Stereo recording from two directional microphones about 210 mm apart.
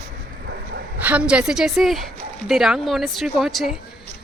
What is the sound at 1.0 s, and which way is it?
Speech, 5° right (ahead or behind).